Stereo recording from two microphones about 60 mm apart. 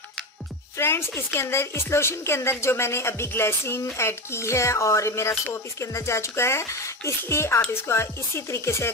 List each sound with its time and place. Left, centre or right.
0.7 s speech: left